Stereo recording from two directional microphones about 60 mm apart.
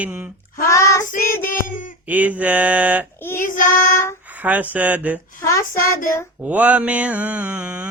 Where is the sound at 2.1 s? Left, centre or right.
Right.